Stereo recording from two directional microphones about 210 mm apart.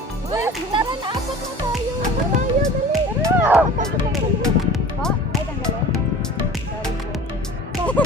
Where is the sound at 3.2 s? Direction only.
10° right (ahead or behind).